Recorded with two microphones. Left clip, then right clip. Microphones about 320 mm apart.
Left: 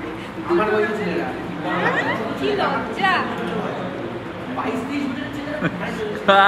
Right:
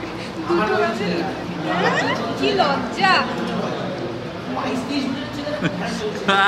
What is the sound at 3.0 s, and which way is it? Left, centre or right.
Speech, right.